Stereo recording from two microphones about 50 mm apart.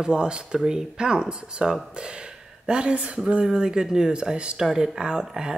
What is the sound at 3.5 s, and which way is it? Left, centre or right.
Speech, centre.